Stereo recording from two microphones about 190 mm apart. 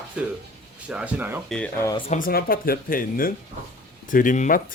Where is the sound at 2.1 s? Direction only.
45° left (ahead or behind).